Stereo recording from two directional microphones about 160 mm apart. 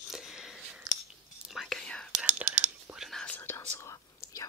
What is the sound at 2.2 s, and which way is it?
Whispering, 10° right (ahead or behind).